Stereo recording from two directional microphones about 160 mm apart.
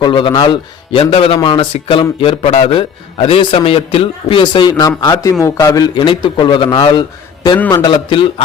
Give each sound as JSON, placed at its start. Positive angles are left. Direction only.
{"t": 0.0, "sound": "a man's voice", "side_deg": 30}